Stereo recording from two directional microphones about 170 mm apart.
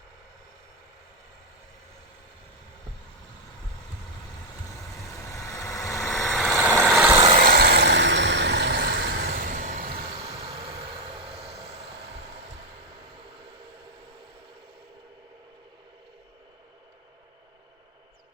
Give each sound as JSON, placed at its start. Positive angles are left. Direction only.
{"t": 5.3, "sound": "vehicle", "side_deg": 20}
{"t": 6.2, "sound": "vehicle", "side_deg": 0}
{"t": 7.3, "sound": "vehicle", "side_deg": -55}